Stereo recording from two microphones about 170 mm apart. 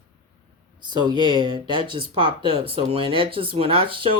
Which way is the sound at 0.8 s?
25° right (ahead or behind).